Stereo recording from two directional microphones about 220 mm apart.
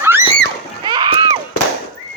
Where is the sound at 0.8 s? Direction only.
20° right (ahead or behind).